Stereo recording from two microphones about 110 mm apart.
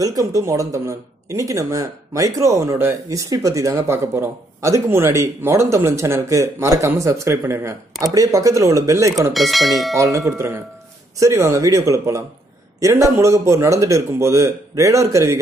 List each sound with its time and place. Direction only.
0.0 s speech: 30° right (ahead or behind)
9.3 s speech: centre (ahead or behind)
9.9 s speech: 30° right (ahead or behind)